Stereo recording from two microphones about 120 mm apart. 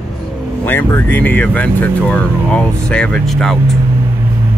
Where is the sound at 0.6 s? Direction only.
15° left (ahead or behind).